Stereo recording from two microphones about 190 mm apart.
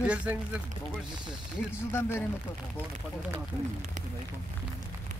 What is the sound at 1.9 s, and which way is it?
Speech, 15° left (ahead or behind).